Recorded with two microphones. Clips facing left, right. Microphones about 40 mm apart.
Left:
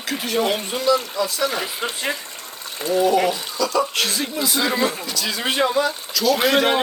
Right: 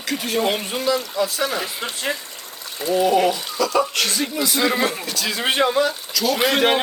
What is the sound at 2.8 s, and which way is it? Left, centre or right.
Speech, right.